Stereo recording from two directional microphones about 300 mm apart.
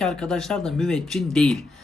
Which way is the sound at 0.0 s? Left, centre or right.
Centre.